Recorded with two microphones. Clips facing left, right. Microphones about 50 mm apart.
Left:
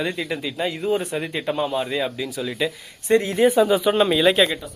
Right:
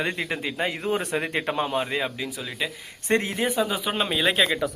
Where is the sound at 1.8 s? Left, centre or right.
Right.